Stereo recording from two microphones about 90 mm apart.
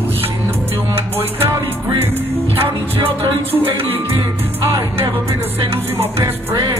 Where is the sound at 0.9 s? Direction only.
25° right (ahead or behind).